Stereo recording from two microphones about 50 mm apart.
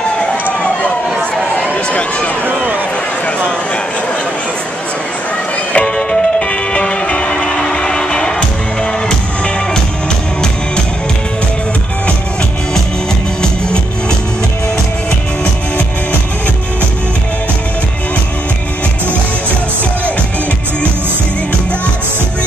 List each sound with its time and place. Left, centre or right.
0.2 s emergency vehicle: left
1.9 s speech: left
2.5 s a sound: right
5.7 s music: left
5.9 s music: centre